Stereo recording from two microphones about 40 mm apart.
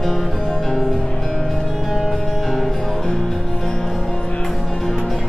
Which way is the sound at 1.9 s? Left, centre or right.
Centre.